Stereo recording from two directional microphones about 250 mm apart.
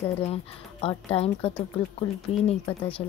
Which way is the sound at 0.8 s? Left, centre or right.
Left.